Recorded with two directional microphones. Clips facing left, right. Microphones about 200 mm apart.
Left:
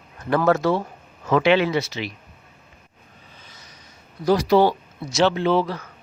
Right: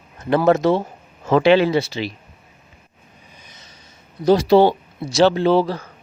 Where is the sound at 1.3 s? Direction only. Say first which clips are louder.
Right 4 dB; 30° right (ahead or behind).